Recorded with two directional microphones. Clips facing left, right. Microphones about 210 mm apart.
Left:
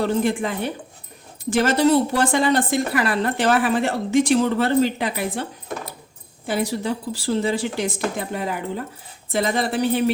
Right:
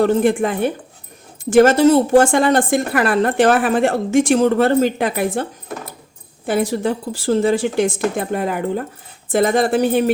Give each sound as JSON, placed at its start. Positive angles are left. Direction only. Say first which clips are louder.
{"t": 0.0, "sound": "a woman's voice", "louder": "right 6 dB", "side_deg": -50}